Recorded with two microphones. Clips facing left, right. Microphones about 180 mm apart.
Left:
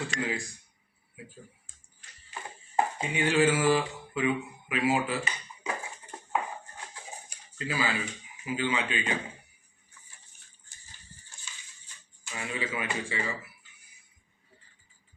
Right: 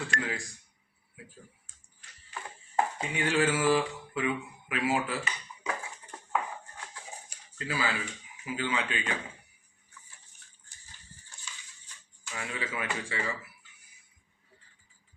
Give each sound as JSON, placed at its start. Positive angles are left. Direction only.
{"t": 0.2, "sound": "speech", "side_deg": 15}
{"t": 2.3, "sound": "speech", "side_deg": 20}
{"t": 4.9, "sound": "dishes", "side_deg": 20}
{"t": 7.7, "sound": "speech", "side_deg": 15}
{"t": 12.3, "sound": "speech", "side_deg": 15}